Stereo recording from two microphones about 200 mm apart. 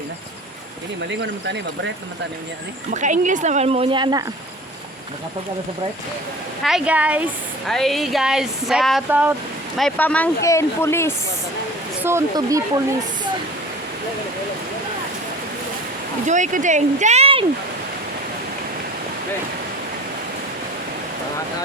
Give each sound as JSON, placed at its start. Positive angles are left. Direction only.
{"t": 1.1, "sound": "speech", "side_deg": -60}
{"t": 2.9, "sound": "speech", "side_deg": -40}
{"t": 6.6, "sound": "a woman's voice", "side_deg": 0}
{"t": 9.7, "sound": "speech", "side_deg": 5}
{"t": 12.0, "sound": "a woman's voice", "side_deg": -15}
{"t": 16.2, "sound": "speech", "side_deg": -40}